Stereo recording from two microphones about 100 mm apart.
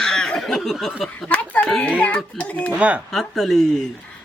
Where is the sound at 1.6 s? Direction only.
5° left (ahead or behind).